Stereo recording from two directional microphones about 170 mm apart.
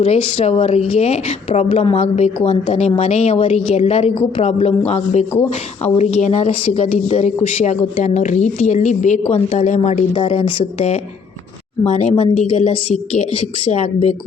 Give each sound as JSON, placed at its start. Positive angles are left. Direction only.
{"t": 0.0, "sound": "a woman's voice", "side_deg": 40}
{"t": 10.1, "sound": "a woman's voice", "side_deg": 35}